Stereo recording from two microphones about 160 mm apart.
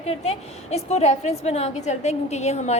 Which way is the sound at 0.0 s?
40° left (ahead or behind).